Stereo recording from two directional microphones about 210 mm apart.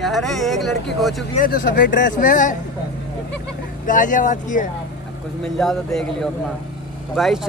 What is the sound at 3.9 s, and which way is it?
Speech, 40° left (ahead or behind).